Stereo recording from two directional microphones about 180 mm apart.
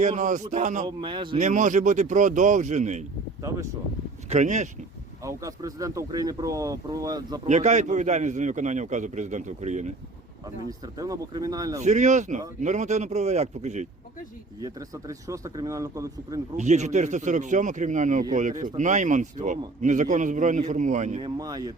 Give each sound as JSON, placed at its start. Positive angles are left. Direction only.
{"t": 0.0, "sound": "a man's voice", "side_deg": -40}
{"t": 0.9, "sound": "speech", "side_deg": -25}
{"t": 1.4, "sound": "a man's voice", "side_deg": -45}
{"t": 4.3, "sound": "a man's voice", "side_deg": -40}
{"t": 5.2, "sound": "speech", "side_deg": -20}
{"t": 7.4, "sound": "a man's voice", "side_deg": -40}
{"t": 10.7, "sound": "speech", "side_deg": -20}
{"t": 11.8, "sound": "a man's voice", "side_deg": -40}
{"t": 14.6, "sound": "speech", "side_deg": -20}
{"t": 16.6, "sound": "a man's voice", "side_deg": -40}
{"t": 21.2, "sound": "speech", "side_deg": -25}